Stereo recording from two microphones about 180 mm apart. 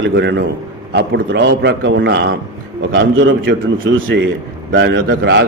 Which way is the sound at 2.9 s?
90° right.